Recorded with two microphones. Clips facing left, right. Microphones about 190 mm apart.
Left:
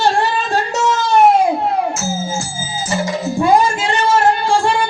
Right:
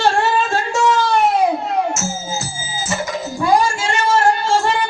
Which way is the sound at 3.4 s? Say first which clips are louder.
Left 2 dB; 20° left (ahead or behind).